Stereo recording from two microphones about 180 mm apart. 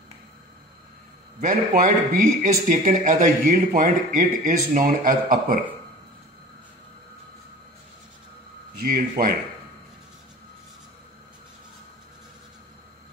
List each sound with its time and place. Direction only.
1.4 s speech: 50° right (ahead or behind)
8.7 s speech: 55° right (ahead or behind)